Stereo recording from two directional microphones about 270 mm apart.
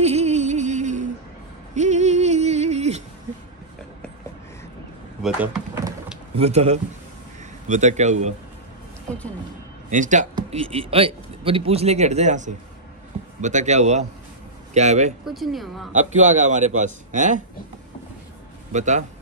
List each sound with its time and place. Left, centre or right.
0.0 s music: right
5.2 s drawer open or close: centre
6.4 s a man's voice: right
9.8 s a man's voice: right
15.2 s speech: centre
15.9 s a man's voice: right
18.7 s a man's voice: right